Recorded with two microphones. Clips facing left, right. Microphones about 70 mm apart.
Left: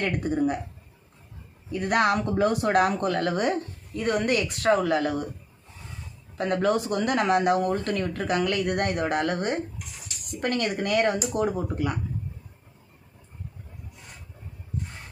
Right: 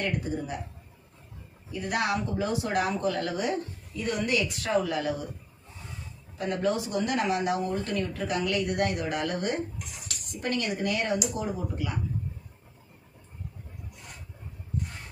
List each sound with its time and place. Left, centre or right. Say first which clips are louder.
0.0 s speech: left 6 dB; left
1.8 s speech: left 6 dB; left
6.3 s speech: left 4 dB; left